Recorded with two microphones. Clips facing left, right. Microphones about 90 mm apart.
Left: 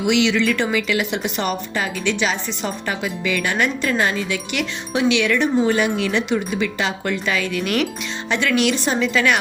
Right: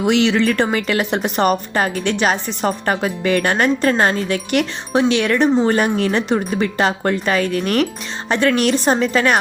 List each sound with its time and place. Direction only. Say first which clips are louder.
0.0 s a woman's voice: right 3 dB; 40° right (ahead or behind)